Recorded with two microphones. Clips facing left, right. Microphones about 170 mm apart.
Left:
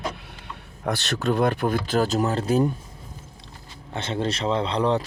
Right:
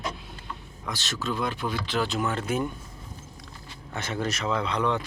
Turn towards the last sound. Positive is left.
turn(degrees=30)  # may be behind; listen again after turning